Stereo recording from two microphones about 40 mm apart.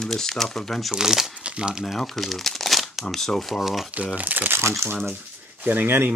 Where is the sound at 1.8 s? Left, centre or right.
Centre.